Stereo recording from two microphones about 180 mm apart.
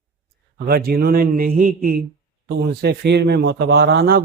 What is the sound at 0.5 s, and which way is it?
Speech, 60° right (ahead or behind).